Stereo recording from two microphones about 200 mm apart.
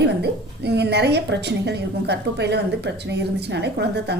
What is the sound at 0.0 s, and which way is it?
A woman's voice, 55° right (ahead or behind).